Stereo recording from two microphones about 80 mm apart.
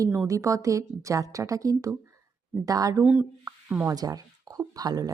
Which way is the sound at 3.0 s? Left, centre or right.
Centre.